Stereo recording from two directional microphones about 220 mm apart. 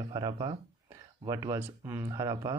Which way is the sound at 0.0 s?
20° right (ahead or behind).